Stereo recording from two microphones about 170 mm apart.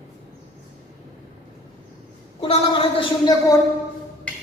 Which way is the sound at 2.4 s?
30° left (ahead or behind).